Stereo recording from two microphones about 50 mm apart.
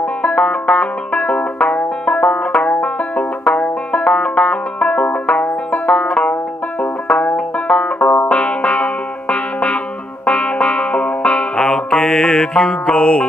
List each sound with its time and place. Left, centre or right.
0.0 s banjo: left
4.8 s music: left
6.8 s banjo: left
8.3 s music: left